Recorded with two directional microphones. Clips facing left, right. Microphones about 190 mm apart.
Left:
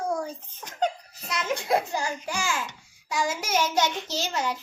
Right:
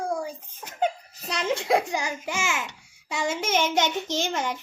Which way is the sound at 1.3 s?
30° right (ahead or behind).